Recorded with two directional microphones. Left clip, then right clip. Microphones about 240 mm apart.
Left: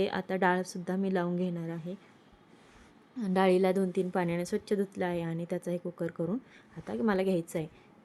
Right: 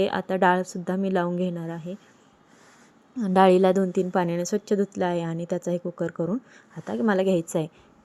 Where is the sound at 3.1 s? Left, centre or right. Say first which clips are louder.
Right 9 dB; centre.